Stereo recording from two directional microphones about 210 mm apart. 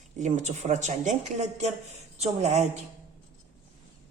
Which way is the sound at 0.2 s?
35° right (ahead or behind).